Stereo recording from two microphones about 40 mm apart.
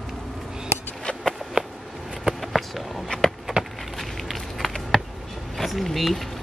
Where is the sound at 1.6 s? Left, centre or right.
Right.